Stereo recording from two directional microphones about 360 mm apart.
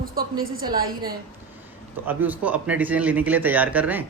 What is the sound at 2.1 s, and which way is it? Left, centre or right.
A man's voice, centre.